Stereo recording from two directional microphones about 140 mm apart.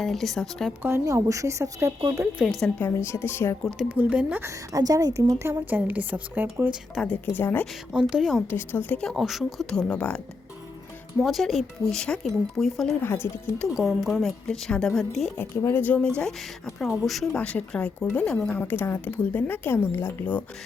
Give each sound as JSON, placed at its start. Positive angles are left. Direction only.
{"t": 0.0, "sound": "speech", "side_deg": 0}
{"t": 0.8, "sound": "speech", "side_deg": -15}
{"t": 2.4, "sound": "speech", "side_deg": 0}
{"t": 2.8, "sound": "a woman's voice", "side_deg": 20}
{"t": 3.6, "sound": "speech", "side_deg": 0}
{"t": 3.8, "sound": "a woman's voice", "side_deg": -10}
{"t": 4.4, "sound": "a woman's voice", "side_deg": -25}
{"t": 6.9, "sound": "a woman's voice", "side_deg": 10}
{"t": 7.9, "sound": "speech", "side_deg": -5}
{"t": 8.4, "sound": "a woman's voice", "side_deg": 15}
{"t": 11.2, "sound": "speech", "side_deg": 0}
{"t": 13.0, "sound": "a woman's voice", "side_deg": 15}
{"t": 13.6, "sound": "speech", "side_deg": 0}
{"t": 15.4, "sound": "a woman's voice", "side_deg": 15}